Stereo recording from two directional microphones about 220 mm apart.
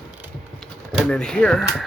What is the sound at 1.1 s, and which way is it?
Speech, 5° left (ahead or behind).